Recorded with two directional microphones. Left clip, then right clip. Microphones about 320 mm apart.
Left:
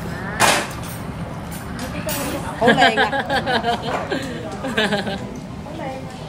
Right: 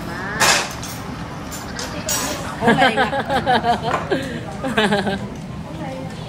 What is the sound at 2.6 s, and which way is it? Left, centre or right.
Speech, centre.